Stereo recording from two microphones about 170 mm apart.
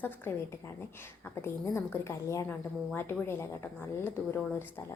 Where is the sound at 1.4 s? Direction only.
15° left (ahead or behind).